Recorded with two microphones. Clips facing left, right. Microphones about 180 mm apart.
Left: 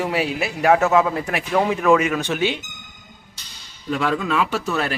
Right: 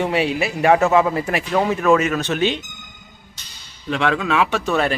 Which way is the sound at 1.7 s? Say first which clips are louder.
Right 1 dB; 10° left (ahead or behind).